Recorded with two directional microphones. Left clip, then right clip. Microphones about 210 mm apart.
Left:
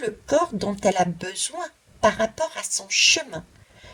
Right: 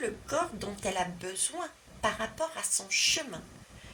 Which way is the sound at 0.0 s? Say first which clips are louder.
Left 10 dB; 35° left (ahead or behind).